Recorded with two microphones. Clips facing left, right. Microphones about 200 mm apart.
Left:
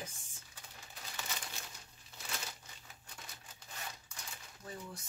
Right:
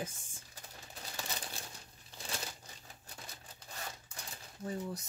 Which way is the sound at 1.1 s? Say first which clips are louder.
Right 2 dB; 30° right (ahead or behind).